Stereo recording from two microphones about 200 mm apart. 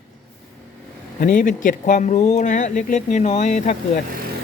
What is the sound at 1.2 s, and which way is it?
Speech, 40° left (ahead or behind).